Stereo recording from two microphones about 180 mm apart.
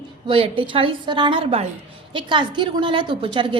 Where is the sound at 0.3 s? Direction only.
30° right (ahead or behind).